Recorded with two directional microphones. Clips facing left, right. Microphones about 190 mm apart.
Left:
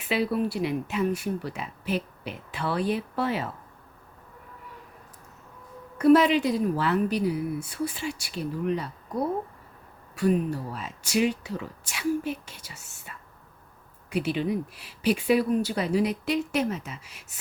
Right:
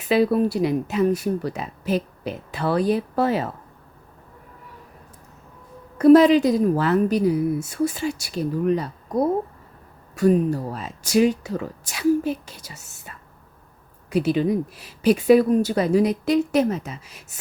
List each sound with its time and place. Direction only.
0.0 s speech: 40° right (ahead or behind)
6.0 s speech: 40° right (ahead or behind)